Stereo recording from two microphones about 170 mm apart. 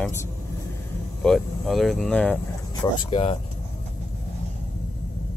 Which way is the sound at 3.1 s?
30° left (ahead or behind).